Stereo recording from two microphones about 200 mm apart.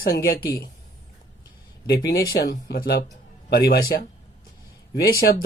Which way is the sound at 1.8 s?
50° left (ahead or behind).